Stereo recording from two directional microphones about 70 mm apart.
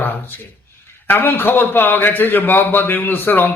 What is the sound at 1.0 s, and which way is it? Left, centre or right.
A man's voice, left.